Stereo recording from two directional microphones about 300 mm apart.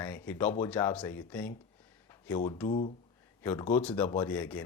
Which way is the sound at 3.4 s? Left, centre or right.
Centre.